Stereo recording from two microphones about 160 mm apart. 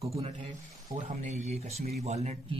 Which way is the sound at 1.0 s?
45° right (ahead or behind).